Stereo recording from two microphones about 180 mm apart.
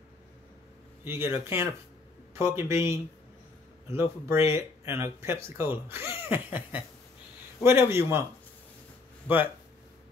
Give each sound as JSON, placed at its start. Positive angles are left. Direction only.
{"t": 1.0, "sound": "speech", "side_deg": -10}